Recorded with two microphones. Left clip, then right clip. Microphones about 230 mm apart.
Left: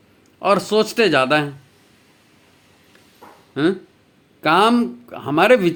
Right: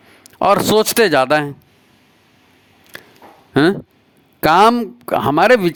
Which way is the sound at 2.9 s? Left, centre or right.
Right.